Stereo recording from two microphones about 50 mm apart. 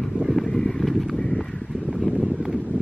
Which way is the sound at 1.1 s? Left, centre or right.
Centre.